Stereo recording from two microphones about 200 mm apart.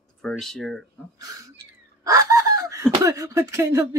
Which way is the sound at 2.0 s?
15° right (ahead or behind).